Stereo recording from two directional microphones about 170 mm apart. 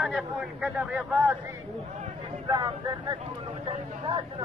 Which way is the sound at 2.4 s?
25° right (ahead or behind).